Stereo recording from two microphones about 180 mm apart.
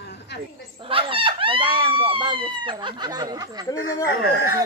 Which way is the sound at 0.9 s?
30° right (ahead or behind).